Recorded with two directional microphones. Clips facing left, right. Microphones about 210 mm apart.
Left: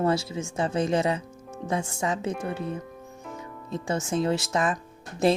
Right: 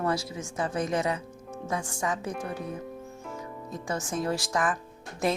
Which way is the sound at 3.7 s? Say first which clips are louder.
Left 5 dB; 25° left (ahead or behind).